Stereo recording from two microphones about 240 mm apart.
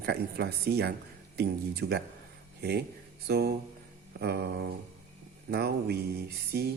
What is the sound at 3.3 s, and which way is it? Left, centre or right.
Speech, right.